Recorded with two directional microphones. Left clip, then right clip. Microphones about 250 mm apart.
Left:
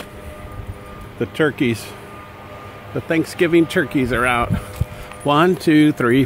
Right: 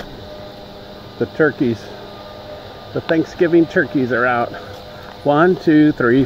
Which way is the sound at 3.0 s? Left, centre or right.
Centre.